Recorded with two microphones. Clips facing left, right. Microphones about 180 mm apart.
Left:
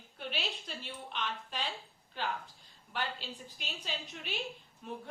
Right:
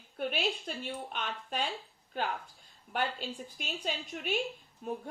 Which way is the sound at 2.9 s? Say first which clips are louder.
Right 5 dB; 50° right (ahead or behind).